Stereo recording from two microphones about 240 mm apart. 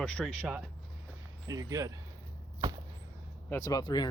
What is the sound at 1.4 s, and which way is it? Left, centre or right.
Speech, centre.